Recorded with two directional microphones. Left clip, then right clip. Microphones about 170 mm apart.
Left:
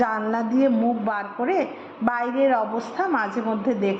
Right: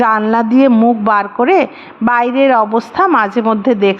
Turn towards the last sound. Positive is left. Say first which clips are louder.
# right 12 dB
turn(degrees=-35)  # may be behind; listen again after turning